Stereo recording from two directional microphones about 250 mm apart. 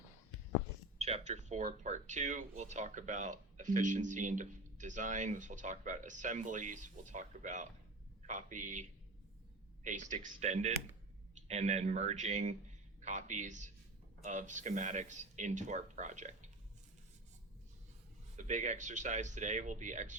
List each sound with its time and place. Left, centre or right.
0.9 s a man's voice: right
18.3 s speech: right